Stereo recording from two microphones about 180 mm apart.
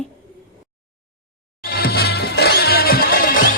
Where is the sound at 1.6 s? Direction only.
60° left (ahead or behind).